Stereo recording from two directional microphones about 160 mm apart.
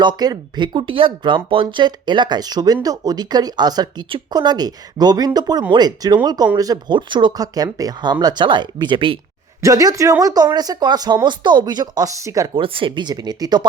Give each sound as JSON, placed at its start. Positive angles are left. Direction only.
{"t": 0.0, "sound": "speech", "side_deg": -25}
{"t": 9.6, "sound": "speech", "side_deg": -20}
{"t": 12.5, "sound": "speech", "side_deg": -35}